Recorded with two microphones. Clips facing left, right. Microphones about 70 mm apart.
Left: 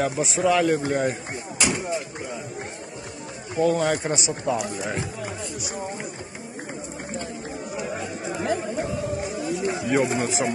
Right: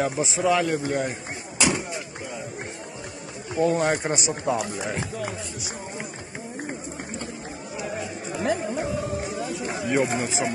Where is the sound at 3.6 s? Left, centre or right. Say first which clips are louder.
Left 1 dB; right.